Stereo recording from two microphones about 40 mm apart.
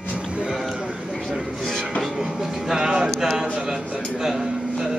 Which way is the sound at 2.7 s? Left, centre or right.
Centre.